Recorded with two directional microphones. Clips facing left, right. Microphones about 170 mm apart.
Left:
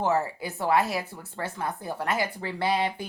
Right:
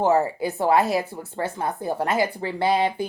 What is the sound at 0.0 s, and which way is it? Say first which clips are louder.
Speech: right 6 dB; 25° right (ahead or behind).